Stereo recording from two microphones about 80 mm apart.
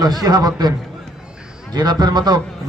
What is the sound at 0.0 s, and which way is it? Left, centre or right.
Speech, right.